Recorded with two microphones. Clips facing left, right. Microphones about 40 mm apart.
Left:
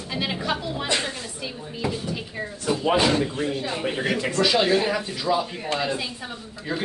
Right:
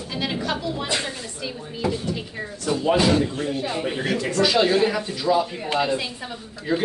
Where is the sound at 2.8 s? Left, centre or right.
Left.